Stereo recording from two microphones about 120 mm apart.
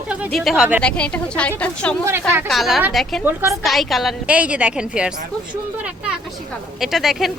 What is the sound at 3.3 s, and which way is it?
Speech, 25° right (ahead or behind).